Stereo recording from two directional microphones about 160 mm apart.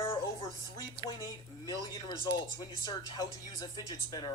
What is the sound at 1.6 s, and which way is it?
Speech, 20° left (ahead or behind).